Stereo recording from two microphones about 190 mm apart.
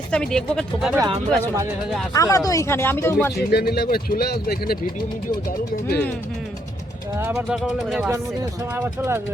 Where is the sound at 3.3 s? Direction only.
55° left (ahead or behind).